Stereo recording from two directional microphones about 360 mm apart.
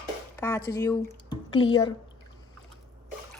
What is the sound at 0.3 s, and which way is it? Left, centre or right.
Speech, centre.